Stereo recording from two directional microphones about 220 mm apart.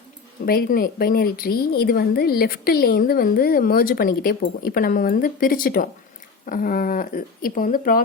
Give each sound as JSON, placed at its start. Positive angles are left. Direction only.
{"t": 0.4, "sound": "a woman's voice", "side_deg": 45}